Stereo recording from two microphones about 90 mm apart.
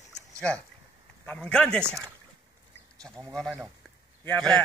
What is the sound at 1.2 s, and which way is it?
Speech, 15° left (ahead or behind).